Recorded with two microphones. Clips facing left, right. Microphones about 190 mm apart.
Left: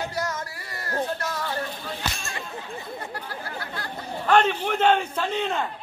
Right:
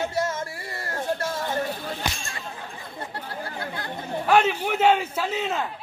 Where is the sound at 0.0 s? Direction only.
25° right (ahead or behind).